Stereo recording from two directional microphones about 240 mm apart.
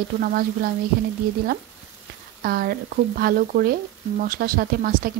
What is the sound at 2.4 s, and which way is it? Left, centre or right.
A woman's voice, right.